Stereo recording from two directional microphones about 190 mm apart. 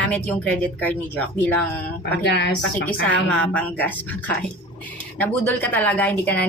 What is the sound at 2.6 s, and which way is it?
A woman's voice, 5° left (ahead or behind).